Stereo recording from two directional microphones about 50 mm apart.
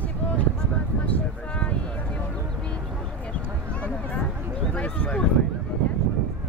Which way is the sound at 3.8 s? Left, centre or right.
Left.